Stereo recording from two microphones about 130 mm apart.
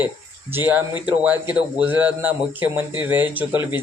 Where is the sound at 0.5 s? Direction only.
15° right (ahead or behind).